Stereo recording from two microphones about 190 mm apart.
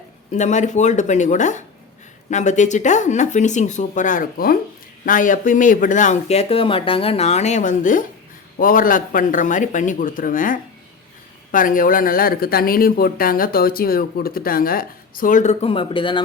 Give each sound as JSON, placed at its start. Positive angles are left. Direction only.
{"t": 0.3, "sound": "speech", "side_deg": 40}